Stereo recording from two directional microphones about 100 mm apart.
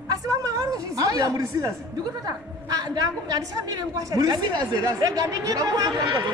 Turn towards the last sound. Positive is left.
turn(degrees=-40)  # may be behind; listen again after turning